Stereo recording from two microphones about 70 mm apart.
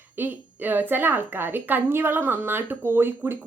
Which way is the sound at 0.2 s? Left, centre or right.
Right.